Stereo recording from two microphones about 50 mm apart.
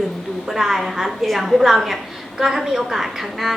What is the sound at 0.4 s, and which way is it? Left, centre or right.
A woman's voice, centre.